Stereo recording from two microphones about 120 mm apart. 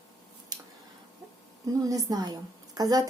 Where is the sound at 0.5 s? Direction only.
35° right (ahead or behind).